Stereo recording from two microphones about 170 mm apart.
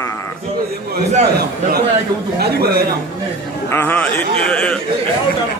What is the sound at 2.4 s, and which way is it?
Speech, 70° right (ahead or behind).